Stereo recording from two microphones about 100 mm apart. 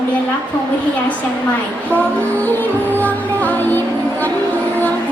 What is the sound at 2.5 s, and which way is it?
Music, 15° left (ahead or behind).